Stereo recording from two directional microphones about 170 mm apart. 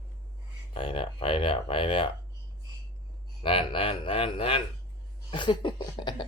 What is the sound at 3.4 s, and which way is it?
Speech, 35° left (ahead or behind).